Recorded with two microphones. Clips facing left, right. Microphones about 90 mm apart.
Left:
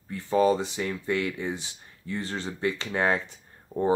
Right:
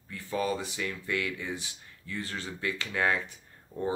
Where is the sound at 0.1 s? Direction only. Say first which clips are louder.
Left 8 dB; 25° left (ahead or behind).